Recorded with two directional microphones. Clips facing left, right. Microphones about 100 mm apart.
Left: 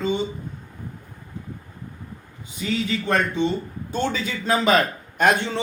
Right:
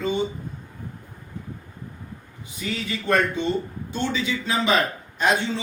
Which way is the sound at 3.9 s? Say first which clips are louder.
Left 1 dB; 45° left (ahead or behind).